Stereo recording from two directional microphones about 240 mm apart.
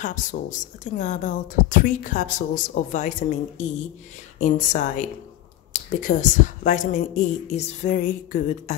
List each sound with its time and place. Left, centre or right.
0.0 s speech: left